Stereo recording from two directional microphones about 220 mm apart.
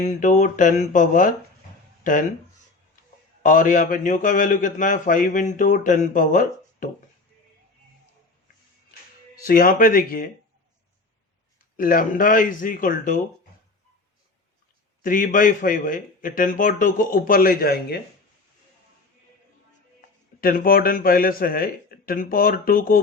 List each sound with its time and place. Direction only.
0.0 s a man's voice: 35° left (ahead or behind)
3.4 s a man's voice: 35° left (ahead or behind)
9.3 s a man's voice: 40° left (ahead or behind)
11.8 s a man's voice: 40° left (ahead or behind)
15.0 s a man's voice: 40° left (ahead or behind)
20.4 s a man's voice: 40° left (ahead or behind)